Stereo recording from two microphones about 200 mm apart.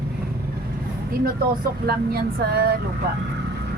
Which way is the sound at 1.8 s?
50° right (ahead or behind).